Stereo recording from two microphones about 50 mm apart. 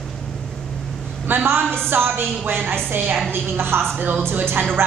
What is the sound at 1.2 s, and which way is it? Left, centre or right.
Speech, right.